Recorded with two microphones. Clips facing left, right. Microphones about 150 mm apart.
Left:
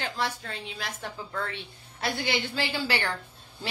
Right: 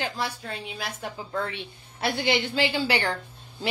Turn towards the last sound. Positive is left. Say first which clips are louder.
# right 4 dB
turn(degrees=-15)  # may be behind; listen again after turning